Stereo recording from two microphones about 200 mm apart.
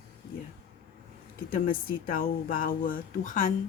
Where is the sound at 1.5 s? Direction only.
45° left (ahead or behind).